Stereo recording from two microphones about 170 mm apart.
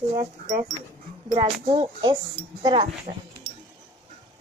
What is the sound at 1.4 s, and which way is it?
Speech, 30° right (ahead or behind).